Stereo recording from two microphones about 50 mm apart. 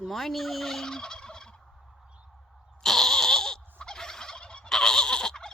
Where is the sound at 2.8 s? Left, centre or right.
Centre.